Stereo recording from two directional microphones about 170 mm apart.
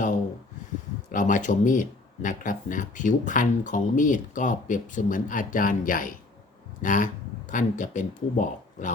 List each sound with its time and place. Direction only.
1.1 s speech: 50° left (ahead or behind)